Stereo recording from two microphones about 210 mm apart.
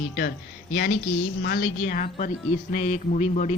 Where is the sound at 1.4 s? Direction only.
50° left (ahead or behind).